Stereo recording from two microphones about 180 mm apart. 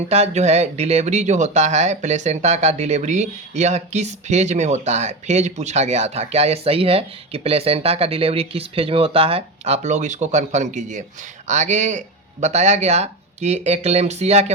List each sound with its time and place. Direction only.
0.1 s speech: 35° right (ahead or behind)